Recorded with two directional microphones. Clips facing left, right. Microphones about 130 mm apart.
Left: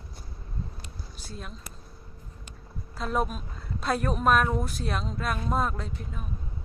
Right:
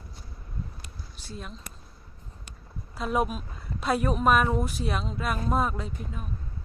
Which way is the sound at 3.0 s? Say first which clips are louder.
Right 2 dB; 5° right (ahead or behind).